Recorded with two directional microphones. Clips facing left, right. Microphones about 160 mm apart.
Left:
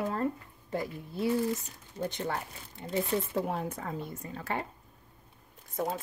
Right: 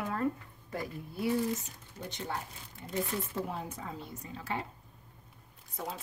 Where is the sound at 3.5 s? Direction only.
60° left (ahead or behind).